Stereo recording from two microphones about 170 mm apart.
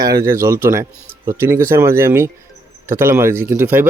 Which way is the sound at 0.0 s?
20° right (ahead or behind).